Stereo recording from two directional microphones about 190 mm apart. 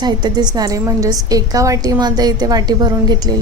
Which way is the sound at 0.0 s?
20° right (ahead or behind).